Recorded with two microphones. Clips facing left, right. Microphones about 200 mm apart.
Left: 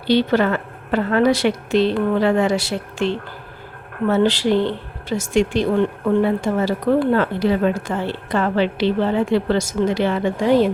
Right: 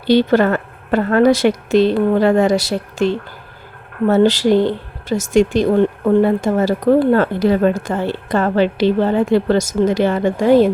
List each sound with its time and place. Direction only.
0.1 s speech: 45° right (ahead or behind)